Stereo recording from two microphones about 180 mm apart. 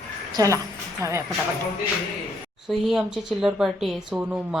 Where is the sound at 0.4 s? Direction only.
20° right (ahead or behind).